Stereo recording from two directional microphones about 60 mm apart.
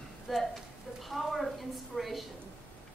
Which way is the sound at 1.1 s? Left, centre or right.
Centre.